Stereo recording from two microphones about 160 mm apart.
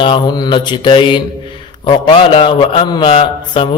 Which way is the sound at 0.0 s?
30° left (ahead or behind).